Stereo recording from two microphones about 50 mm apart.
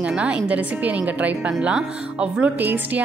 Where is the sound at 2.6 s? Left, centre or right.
Right.